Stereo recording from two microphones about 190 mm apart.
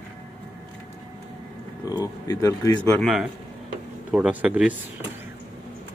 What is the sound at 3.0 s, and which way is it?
A man's voice, 5° right (ahead or behind).